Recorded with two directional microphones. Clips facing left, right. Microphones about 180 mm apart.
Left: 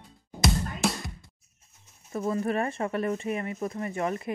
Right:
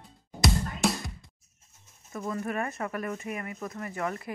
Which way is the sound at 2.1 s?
30° left (ahead or behind).